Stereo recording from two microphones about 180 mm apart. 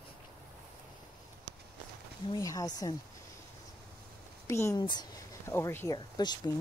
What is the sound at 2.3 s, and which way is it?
Speech, 20° left (ahead or behind).